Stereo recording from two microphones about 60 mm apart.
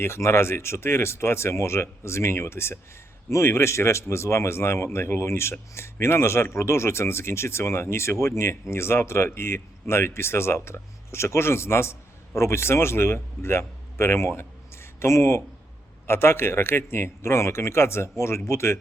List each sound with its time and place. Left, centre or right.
0.0 s speech: left
16.0 s speech: left